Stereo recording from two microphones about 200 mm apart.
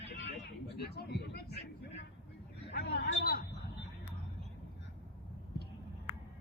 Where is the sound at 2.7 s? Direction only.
55° left (ahead or behind).